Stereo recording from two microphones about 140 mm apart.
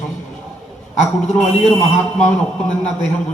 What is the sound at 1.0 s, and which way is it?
Speech, 55° left (ahead or behind).